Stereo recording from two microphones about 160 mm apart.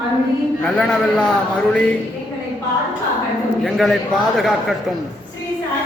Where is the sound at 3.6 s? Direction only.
Centre (ahead or behind).